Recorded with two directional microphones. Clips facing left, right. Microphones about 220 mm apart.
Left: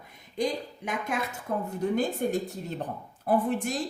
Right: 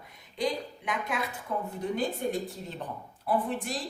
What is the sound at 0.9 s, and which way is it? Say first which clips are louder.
Speech: left 2 dB; 45° left (ahead or behind).